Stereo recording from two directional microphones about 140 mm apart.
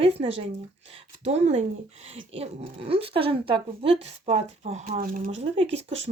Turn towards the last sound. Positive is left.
turn(degrees=-45)  # may be behind; listen again after turning